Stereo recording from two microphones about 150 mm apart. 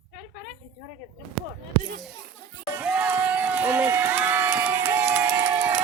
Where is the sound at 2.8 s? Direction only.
10° right (ahead or behind).